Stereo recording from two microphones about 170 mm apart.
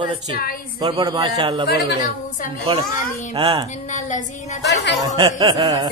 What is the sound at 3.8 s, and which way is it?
Speech, 45° left (ahead or behind).